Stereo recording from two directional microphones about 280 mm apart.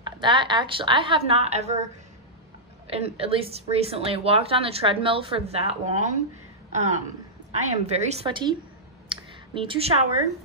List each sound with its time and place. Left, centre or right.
0.0 s a woman's voice: centre
2.9 s a woman's voice: right
9.1 s a sound: centre